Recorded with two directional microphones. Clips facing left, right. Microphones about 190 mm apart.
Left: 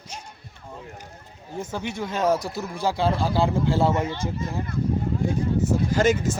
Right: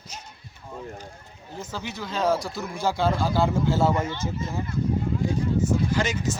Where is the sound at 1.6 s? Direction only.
25° left (ahead or behind).